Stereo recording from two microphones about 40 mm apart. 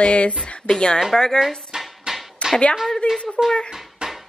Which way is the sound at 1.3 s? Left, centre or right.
Centre.